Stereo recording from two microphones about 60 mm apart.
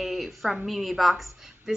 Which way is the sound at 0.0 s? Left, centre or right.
Centre.